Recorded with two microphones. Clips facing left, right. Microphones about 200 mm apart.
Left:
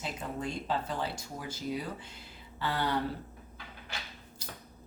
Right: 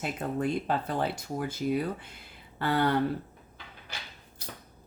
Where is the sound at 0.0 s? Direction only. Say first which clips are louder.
Right 6 dB; 60° right (ahead or behind).